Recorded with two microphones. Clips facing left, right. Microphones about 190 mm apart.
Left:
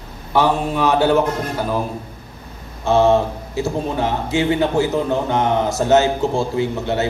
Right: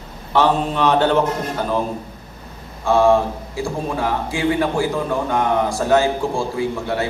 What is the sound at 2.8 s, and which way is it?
A man's voice, 20° left (ahead or behind).